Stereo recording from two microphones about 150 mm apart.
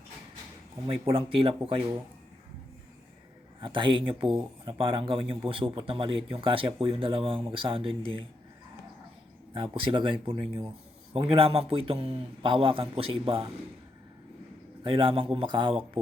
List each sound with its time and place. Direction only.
0.9 s a man's voice: 40° right (ahead or behind)
3.6 s a man's voice: 35° right (ahead or behind)
9.6 s a man's voice: 35° right (ahead or behind)
14.8 s a man's voice: 35° right (ahead or behind)